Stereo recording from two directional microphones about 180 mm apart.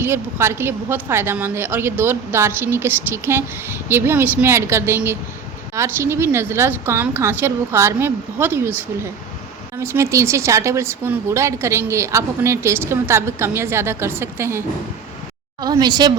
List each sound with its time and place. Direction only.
0.0 s a woman's voice: 15° right (ahead or behind)
15.6 s a woman's voice: 20° right (ahead or behind)